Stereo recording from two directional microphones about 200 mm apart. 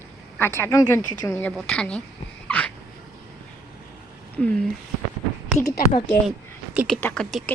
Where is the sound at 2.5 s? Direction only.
10° left (ahead or behind).